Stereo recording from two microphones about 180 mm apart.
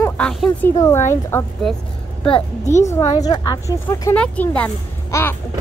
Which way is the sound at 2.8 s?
15° left (ahead or behind).